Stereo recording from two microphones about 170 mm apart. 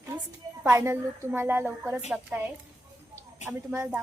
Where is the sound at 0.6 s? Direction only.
15° right (ahead or behind).